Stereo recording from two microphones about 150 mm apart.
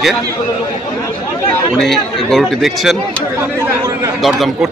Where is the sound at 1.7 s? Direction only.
Centre (ahead or behind).